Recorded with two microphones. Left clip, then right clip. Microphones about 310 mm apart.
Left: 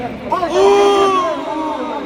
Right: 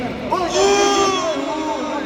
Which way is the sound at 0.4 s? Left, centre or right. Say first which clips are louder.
Left 5 dB; centre.